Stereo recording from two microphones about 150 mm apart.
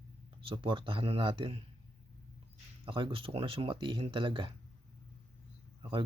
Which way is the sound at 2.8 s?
35° right (ahead or behind).